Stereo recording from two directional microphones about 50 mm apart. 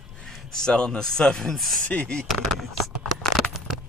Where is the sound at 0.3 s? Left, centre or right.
Centre.